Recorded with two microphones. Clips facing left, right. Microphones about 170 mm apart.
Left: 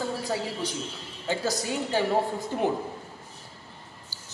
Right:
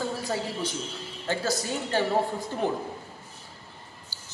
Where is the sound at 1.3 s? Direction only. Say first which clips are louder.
Even; 10° left (ahead or behind).